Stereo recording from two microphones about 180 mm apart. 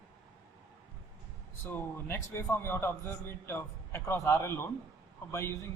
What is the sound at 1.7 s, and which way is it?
A man's voice, 10° left (ahead or behind).